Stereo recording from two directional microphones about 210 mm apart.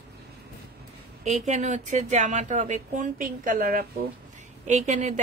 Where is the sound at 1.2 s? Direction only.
35° right (ahead or behind).